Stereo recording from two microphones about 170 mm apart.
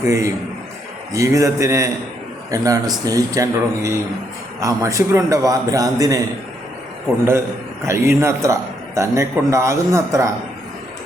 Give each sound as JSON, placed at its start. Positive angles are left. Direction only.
{"t": 0.0, "sound": "a man's voice", "side_deg": -15}
{"t": 7.3, "sound": "a man's voice", "side_deg": -15}